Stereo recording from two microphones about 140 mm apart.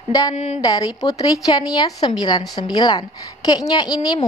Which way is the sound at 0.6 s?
25° left (ahead or behind).